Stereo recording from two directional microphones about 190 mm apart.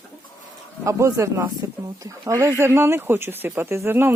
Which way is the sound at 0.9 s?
15° right (ahead or behind).